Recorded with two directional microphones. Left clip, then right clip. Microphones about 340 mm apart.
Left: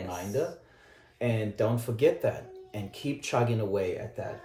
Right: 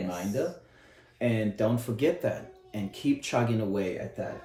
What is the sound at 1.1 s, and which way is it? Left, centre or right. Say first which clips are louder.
Speech: right 1 dB; centre.